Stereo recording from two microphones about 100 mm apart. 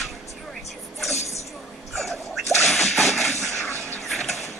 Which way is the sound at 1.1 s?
90° left.